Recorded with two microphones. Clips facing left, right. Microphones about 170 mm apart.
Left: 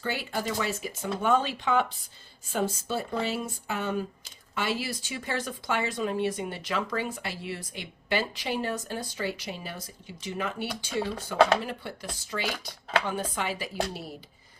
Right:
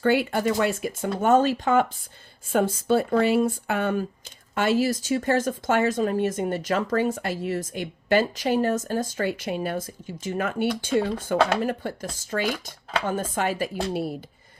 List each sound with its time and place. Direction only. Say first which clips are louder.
0.0 s speech: right 10 dB; 60° right (ahead or behind)
2.5 s speech: right 8 dB; 60° right (ahead or behind)